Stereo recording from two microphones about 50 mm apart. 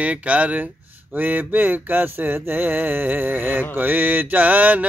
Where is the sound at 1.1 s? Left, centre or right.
Right.